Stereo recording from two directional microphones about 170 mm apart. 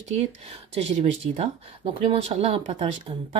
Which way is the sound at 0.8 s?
40° right (ahead or behind).